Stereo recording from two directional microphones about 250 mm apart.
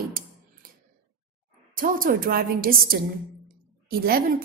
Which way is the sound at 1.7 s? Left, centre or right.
Right.